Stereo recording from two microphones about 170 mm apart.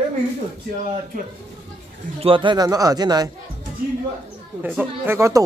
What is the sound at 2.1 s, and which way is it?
Speech, 30° right (ahead or behind).